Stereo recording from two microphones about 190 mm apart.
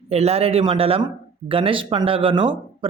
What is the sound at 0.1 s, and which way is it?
Speech, 35° right (ahead or behind).